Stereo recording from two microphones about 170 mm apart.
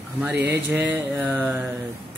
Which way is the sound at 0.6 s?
10° right (ahead or behind).